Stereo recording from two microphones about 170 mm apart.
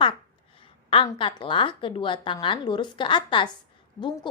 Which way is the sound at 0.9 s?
30° left (ahead or behind).